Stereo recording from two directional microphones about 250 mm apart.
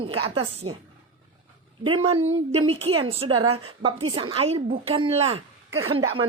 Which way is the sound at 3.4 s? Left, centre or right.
Right.